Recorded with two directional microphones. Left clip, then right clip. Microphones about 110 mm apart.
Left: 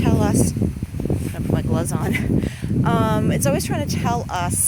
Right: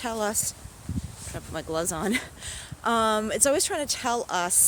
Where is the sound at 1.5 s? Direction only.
30° right (ahead or behind).